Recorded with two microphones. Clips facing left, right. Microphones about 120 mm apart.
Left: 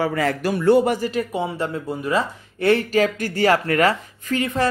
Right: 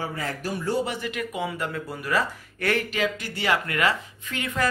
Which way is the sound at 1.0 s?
35° left (ahead or behind).